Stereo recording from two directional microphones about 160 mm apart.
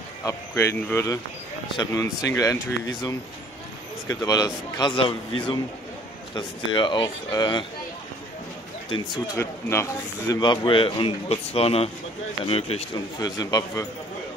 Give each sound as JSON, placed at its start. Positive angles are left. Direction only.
{"t": 0.2, "sound": "a man's voice", "side_deg": 20}
{"t": 9.3, "sound": "a man's voice", "side_deg": 15}
{"t": 12.9, "sound": "a man's voice", "side_deg": 25}